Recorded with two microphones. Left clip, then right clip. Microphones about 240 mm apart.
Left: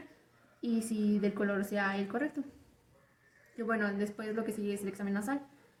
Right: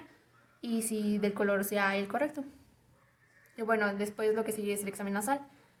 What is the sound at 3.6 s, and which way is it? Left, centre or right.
A woman's voice, right.